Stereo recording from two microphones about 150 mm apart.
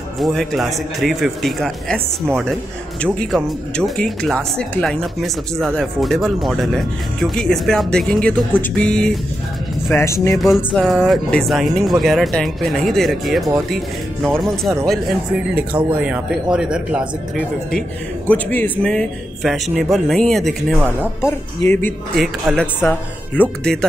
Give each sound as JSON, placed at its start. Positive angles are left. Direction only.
{"t": 0.2, "sound": "speech", "side_deg": 0}
{"t": 3.0, "sound": "speech", "side_deg": 5}
{"t": 9.9, "sound": "speech", "side_deg": 20}
{"t": 10.8, "sound": "speech", "side_deg": 0}
{"t": 15.5, "sound": "speech", "side_deg": -10}
{"t": 18.3, "sound": "speech", "side_deg": 10}
{"t": 21.2, "sound": "speech", "side_deg": 15}
{"t": 22.1, "sound": "speech", "side_deg": 0}
{"t": 22.8, "sound": "speech", "side_deg": 15}